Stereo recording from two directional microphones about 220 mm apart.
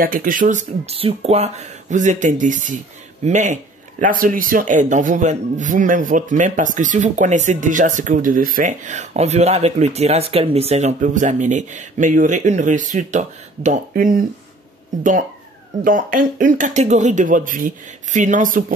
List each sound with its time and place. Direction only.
0.0 s a man's voice: 40° right (ahead or behind)
15.8 s a man's voice: 40° right (ahead or behind)